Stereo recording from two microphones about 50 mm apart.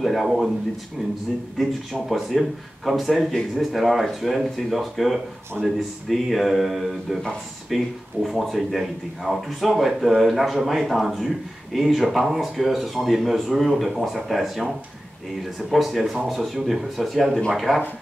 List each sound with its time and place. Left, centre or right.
0.0 s speech: centre
2.0 s speech: centre
5.6 s speech: right
6.0 s speech: centre
15.7 s speech: centre